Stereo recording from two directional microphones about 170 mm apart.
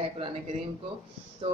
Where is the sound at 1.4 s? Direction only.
30° right (ahead or behind).